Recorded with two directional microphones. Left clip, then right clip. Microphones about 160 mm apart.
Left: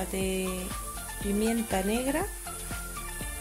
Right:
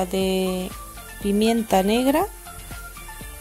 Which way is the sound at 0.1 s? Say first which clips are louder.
Right 9 dB; 40° right (ahead or behind).